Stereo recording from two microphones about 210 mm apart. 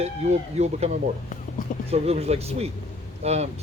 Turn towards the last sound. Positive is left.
turn(degrees=-30)  # may be behind; listen again after turning